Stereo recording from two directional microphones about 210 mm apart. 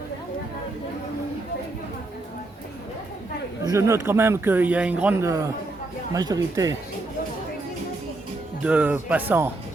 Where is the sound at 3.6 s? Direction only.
15° right (ahead or behind).